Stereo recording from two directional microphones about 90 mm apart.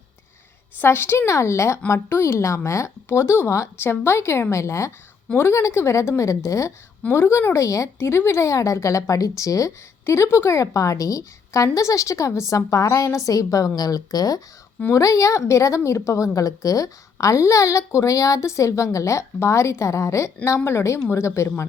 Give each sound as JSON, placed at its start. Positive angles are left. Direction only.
{"t": 0.8, "sound": "speech", "side_deg": 25}